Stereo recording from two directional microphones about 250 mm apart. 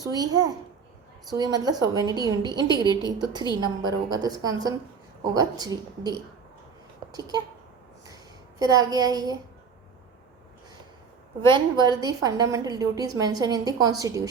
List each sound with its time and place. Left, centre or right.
0.0 s a woman's voice: centre
8.0 s a sound: centre
11.5 s a woman's voice: centre